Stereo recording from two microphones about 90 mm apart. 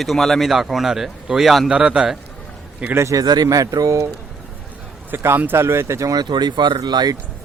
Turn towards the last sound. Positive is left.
turn(degrees=-50)  # may be behind; listen again after turning